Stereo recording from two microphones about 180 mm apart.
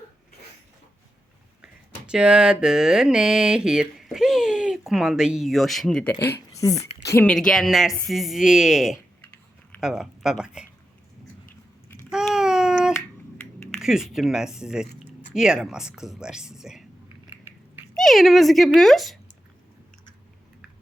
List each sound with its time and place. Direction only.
1.6 s mantra: 5° right (ahead or behind)
4.9 s speech: centre (ahead or behind)
6.2 s a woman's voice: 20° left (ahead or behind)
7.3 s speech: centre (ahead or behind)
12.1 s a sound: 5° right (ahead or behind)
13.7 s speech: centre (ahead or behind)
17.9 s speech: centre (ahead or behind)